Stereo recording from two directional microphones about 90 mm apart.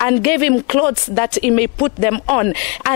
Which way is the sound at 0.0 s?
15° left (ahead or behind).